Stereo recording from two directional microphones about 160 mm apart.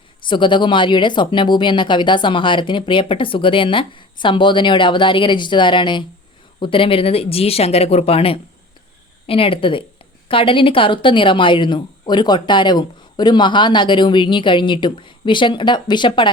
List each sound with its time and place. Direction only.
0.3 s speech: 30° left (ahead or behind)